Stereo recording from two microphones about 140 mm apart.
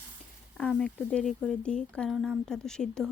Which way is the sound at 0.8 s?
10° left (ahead or behind).